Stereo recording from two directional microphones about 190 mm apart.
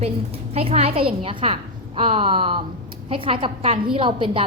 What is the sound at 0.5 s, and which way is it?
A woman's voice, 30° right (ahead or behind).